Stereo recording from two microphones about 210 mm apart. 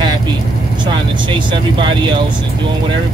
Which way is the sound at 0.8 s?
25° right (ahead or behind).